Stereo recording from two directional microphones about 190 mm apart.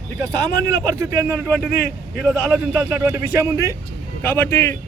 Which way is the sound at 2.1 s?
5° right (ahead or behind).